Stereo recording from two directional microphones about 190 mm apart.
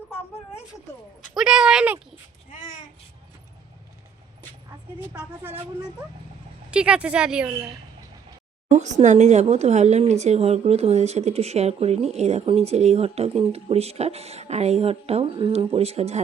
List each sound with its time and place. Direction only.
0.1 s a sound: 10° left (ahead or behind)
1.3 s a woman's voice: centre (ahead or behind)
5.1 s speech: 10° right (ahead or behind)
6.7 s a woman's voice: 5° right (ahead or behind)
9.0 s a woman's voice: 35° right (ahead or behind)